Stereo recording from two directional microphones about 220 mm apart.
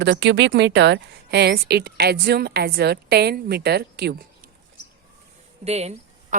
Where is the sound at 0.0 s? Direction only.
50° right (ahead or behind).